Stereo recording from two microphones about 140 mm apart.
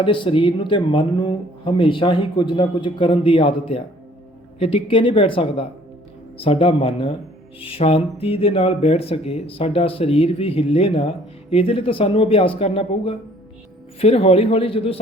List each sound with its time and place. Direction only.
0.0 s speech: 35° left (ahead or behind)